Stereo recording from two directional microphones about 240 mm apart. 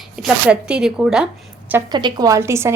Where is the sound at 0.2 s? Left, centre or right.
Centre.